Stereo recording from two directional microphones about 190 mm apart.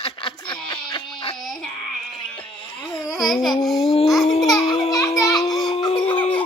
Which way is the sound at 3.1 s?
Centre (ahead or behind).